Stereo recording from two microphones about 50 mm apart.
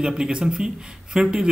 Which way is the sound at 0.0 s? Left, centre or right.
Centre.